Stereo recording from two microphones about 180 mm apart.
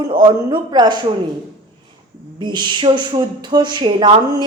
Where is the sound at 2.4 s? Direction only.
25° right (ahead or behind).